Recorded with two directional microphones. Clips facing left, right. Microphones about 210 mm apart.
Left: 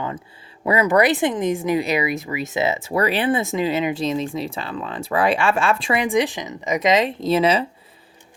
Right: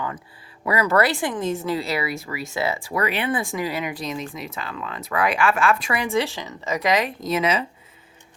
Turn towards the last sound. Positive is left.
turn(degrees=30)  # may be behind; listen again after turning